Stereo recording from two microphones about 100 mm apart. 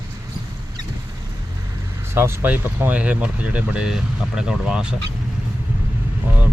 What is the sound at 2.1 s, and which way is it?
Speech, 25° right (ahead or behind).